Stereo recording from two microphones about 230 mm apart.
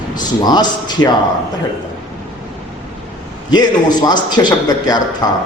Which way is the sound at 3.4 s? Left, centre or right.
Centre.